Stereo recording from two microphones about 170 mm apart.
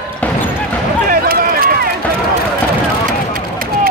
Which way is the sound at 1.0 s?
60° right (ahead or behind).